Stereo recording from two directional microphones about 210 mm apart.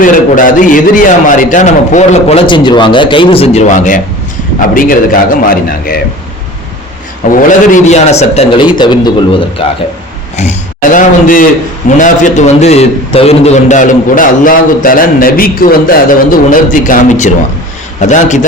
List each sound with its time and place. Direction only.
0.0 s a man's voice: 40° left (ahead or behind)
7.3 s a man's voice: 35° left (ahead or behind)
10.9 s a man's voice: 40° left (ahead or behind)